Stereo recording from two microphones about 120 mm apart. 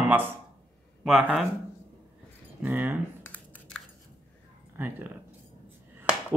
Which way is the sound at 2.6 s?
15° right (ahead or behind).